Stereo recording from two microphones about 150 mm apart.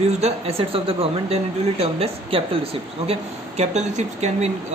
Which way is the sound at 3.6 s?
50° right (ahead or behind).